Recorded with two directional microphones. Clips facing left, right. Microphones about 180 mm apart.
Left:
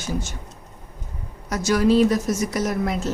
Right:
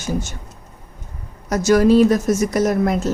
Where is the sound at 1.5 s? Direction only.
45° right (ahead or behind).